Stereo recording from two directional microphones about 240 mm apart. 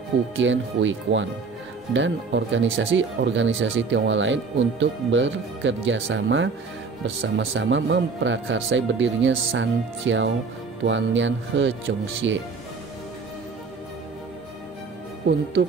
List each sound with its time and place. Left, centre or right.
0.4 s speech: right